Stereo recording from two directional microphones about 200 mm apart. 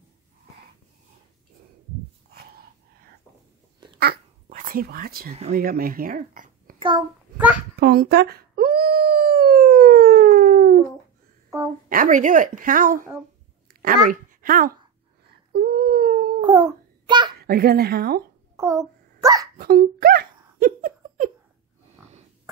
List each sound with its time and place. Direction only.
3.8 s babbling: 25° right (ahead or behind)
4.5 s speech: 40° right (ahead or behind)
5.3 s a woman's voice: 35° right (ahead or behind)
5.6 s speech: 45° right (ahead or behind)
6.8 s a child's voice: 25° right (ahead or behind)
7.7 s dog: 50° right (ahead or behind)
11.9 s a woman's voice: 40° right (ahead or behind)
15.5 s a sound: 45° right (ahead or behind)
16.3 s babbling: 25° right (ahead or behind)
17.4 s speech: 50° right (ahead or behind)
18.6 s a sound: 15° right (ahead or behind)
19.6 s a sound: 45° right (ahead or behind)